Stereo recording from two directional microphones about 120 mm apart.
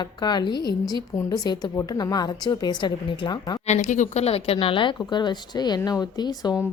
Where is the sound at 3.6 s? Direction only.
80° left.